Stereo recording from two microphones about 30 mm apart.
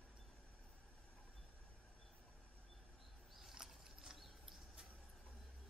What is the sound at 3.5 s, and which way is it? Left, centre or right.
Ratchet, centre.